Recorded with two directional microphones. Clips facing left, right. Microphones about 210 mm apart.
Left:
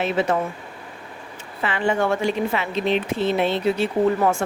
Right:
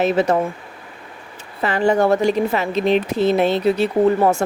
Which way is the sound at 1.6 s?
40° right (ahead or behind).